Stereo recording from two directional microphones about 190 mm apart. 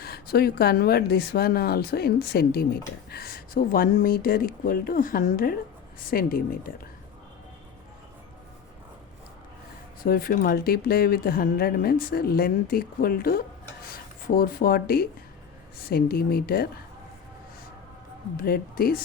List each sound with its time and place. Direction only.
0.0 s speech: 55° left (ahead or behind)
10.0 s speech: 50° left (ahead or behind)
18.4 s speech: 50° left (ahead or behind)